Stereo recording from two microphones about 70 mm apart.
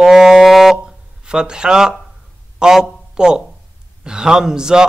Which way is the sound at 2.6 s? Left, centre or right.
Centre.